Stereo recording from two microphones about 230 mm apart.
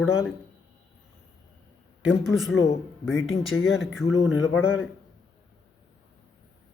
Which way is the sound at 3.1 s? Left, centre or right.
Left.